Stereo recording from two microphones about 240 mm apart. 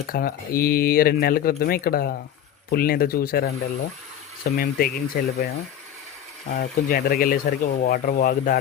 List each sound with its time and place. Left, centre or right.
0.1 s speech: left
6.6 s speech: left